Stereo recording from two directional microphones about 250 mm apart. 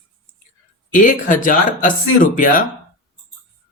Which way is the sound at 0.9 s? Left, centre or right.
Left.